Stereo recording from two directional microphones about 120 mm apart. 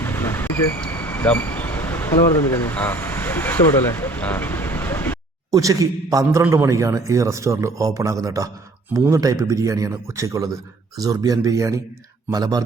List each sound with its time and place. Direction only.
0.0 s vehicle: 15° left (ahead or behind)
5.5 s speech: 30° right (ahead or behind)